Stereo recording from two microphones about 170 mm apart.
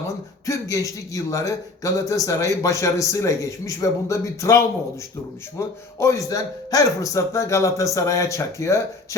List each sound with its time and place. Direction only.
0.4 s a man's voice: 20° left (ahead or behind)